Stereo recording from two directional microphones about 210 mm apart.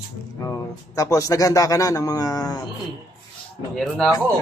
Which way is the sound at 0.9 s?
15° left (ahead or behind).